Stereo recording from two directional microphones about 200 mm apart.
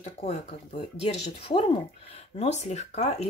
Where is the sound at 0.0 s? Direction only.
35° left (ahead or behind).